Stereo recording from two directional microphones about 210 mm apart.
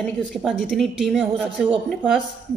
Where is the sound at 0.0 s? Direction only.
Centre (ahead or behind).